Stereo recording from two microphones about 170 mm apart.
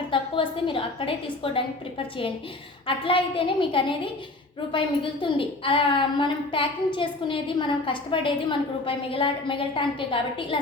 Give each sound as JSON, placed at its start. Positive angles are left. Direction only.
{"t": 0.1, "sound": "a woman's voice", "side_deg": 30}
{"t": 5.2, "sound": "a woman's voice", "side_deg": 30}